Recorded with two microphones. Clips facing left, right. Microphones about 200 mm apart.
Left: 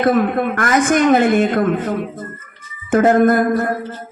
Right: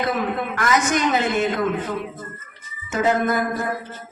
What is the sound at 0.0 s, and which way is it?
A woman's voice, 50° left (ahead or behind).